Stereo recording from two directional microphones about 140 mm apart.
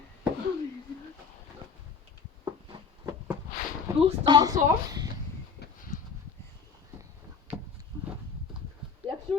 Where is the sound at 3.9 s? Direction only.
20° right (ahead or behind).